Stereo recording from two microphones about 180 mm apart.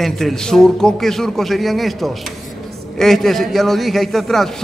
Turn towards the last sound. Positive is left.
turn(degrees=0)  # may be behind; listen again after turning